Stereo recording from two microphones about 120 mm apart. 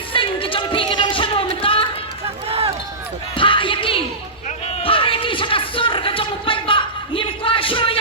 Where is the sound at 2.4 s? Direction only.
55° right (ahead or behind).